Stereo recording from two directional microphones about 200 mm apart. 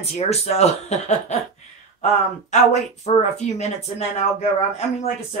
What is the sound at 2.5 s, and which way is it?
Speech, 35° left (ahead or behind).